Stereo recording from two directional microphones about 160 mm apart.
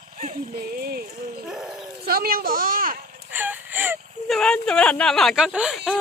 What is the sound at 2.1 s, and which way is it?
Speech, 65° right (ahead or behind).